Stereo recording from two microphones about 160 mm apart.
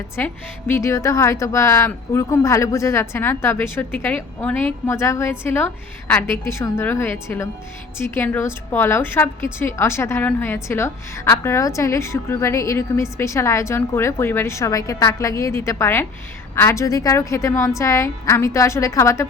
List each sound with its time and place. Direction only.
0.7 s a woman's voice: 15° left (ahead or behind)